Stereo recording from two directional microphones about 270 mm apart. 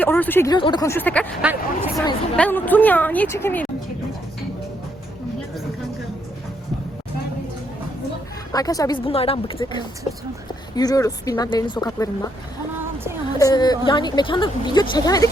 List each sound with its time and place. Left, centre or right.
0.0 s a woman's voice: centre
1.4 s speech: centre
2.3 s a woman's voice: centre
8.5 s a woman's voice: centre
13.4 s a woman's voice: centre